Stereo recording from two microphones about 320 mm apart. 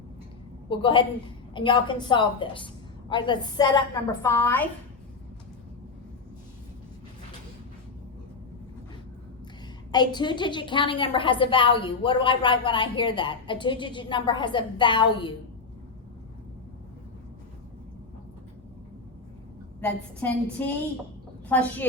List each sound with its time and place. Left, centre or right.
0.7 s a woman's voice: centre
9.9 s a woman's voice: centre
19.8 s a woman's voice: centre